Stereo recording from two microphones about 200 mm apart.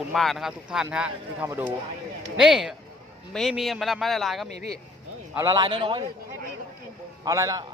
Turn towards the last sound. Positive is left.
turn(degrees=-15)  # may be behind; listen again after turning